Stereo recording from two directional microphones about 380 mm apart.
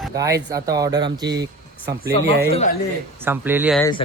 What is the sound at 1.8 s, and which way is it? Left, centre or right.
Speech, right.